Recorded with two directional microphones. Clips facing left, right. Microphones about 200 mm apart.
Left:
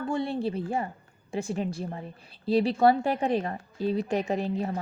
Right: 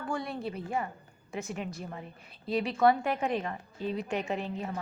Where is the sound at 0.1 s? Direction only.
25° left (ahead or behind).